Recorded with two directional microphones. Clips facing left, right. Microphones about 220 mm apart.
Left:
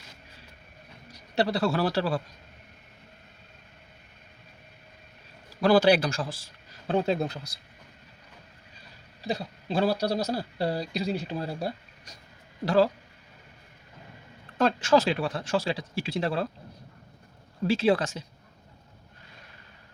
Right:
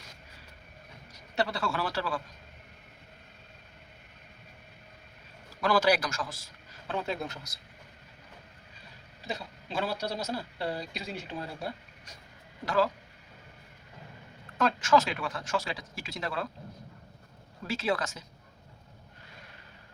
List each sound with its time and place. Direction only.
1.4 s speech: 35° left (ahead or behind)
5.5 s a man's voice: 30° left (ahead or behind)
9.2 s speech: 35° left (ahead or behind)
14.6 s speech: 30° left (ahead or behind)
17.7 s speech: 30° left (ahead or behind)